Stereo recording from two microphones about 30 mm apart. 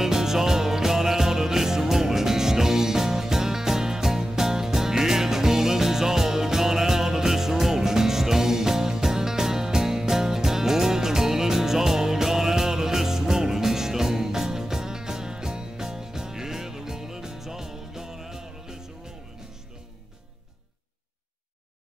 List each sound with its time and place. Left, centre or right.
0.0 s music: centre